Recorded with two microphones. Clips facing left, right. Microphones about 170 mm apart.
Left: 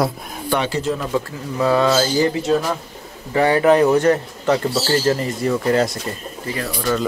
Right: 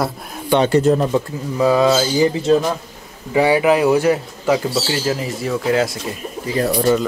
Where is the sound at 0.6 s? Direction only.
50° right (ahead or behind).